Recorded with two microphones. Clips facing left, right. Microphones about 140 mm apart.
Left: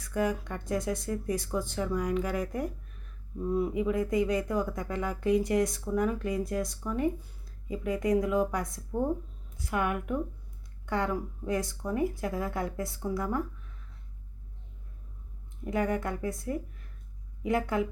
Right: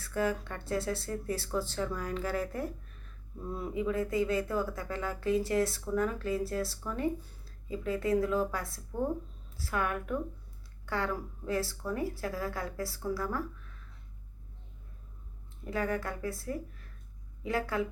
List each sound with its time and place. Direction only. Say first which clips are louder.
0.0 s a woman's voice: left 2 dB; 15° left (ahead or behind)
15.6 s a woman's voice: left 3 dB; 20° left (ahead or behind)